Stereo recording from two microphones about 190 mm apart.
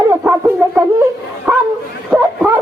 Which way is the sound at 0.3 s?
10° right (ahead or behind).